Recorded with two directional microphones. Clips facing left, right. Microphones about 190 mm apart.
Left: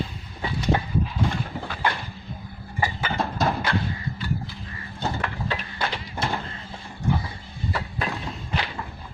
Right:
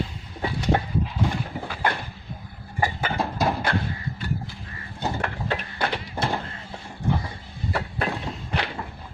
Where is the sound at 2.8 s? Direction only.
50° right (ahead or behind).